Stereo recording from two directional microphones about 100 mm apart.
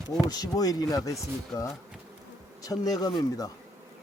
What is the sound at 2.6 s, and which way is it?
Speech, 35° left (ahead or behind).